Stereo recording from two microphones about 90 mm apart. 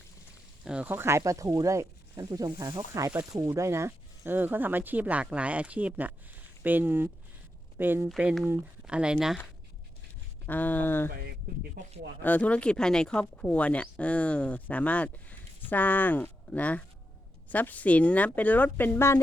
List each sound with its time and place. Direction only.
0.6 s speech: 10° right (ahead or behind)
0.9 s speech: 30° right (ahead or behind)
8.8 s speech: 10° right (ahead or behind)
10.4 s speech: 20° left (ahead or behind)
12.2 s speech: 15° left (ahead or behind)